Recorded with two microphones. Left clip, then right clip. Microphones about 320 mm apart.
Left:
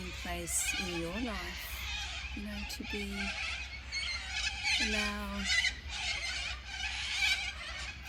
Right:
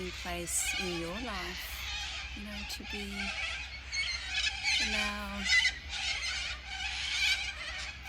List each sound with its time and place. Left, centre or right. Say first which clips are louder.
3.9 s squeal: right 3 dB; centre
4.9 s speech: right 1 dB; centre
5.4 s a sound: right 4 dB; left
6.9 s insect: right 1 dB; left